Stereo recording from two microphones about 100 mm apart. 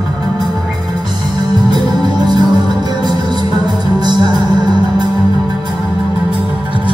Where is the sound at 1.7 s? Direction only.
45° right (ahead or behind).